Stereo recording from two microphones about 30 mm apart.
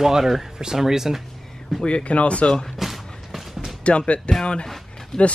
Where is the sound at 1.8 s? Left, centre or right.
Left.